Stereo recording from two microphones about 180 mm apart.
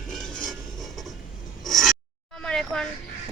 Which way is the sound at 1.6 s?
Centre (ahead or behind).